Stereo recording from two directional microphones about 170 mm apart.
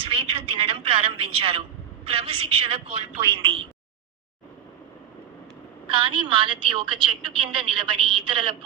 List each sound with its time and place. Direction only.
0.0 s a woman's voice: 35° right (ahead or behind)
5.9 s a woman's voice: 30° right (ahead or behind)